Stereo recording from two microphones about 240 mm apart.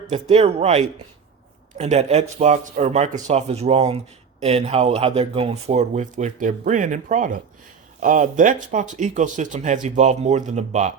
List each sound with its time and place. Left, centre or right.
0.1 s speech: right